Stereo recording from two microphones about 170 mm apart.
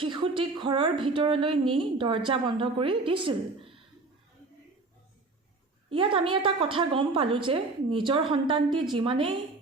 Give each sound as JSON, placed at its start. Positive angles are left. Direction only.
{"t": 0.0, "sound": "a woman's voice", "side_deg": -30}
{"t": 6.0, "sound": "a woman's voice", "side_deg": -30}